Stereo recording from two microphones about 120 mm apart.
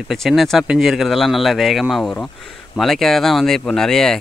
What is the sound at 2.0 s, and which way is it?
Speech, 10° left (ahead or behind).